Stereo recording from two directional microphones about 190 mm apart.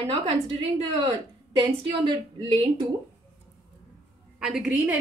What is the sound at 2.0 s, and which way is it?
Speech, 25° right (ahead or behind).